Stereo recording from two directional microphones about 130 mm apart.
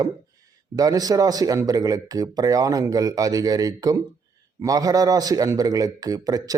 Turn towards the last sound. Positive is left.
turn(degrees=-30)  # may be behind; listen again after turning